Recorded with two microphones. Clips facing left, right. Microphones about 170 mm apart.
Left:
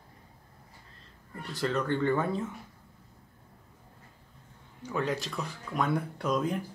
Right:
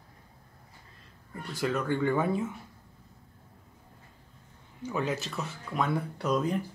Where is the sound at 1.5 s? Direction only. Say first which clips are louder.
Even; 5° right (ahead or behind).